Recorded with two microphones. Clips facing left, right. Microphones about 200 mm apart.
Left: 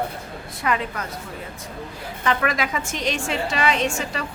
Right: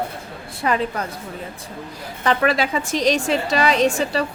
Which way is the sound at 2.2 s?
35° right (ahead or behind).